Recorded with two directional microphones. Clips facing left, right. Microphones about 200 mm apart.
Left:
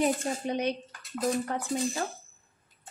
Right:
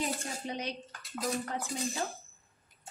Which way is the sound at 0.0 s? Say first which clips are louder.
Left 8 dB; 60° left (ahead or behind).